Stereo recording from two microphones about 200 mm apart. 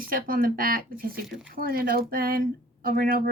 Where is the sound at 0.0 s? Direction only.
45° right (ahead or behind).